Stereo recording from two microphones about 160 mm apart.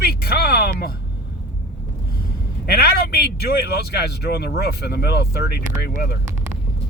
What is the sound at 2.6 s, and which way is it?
A man's voice, 80° left.